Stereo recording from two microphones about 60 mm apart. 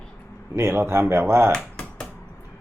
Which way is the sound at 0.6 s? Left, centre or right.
Right.